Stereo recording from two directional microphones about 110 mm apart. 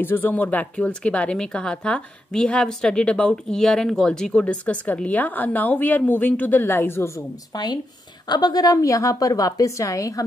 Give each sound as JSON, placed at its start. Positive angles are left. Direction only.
{"t": 0.0, "sound": "speech", "side_deg": 20}
{"t": 7.5, "sound": "a woman's voice", "side_deg": 40}